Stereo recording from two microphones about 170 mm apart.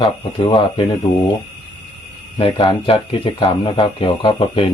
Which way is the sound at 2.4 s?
30° left (ahead or behind).